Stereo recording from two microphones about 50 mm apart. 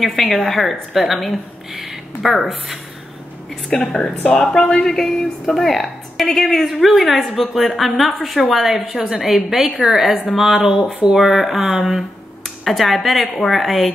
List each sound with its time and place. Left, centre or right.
0.0 s a woman's voice: centre
3.7 s speech: centre
6.8 s a woman's voice: centre
8.9 s a woman's voice: right
9.2 s a woman's voice: centre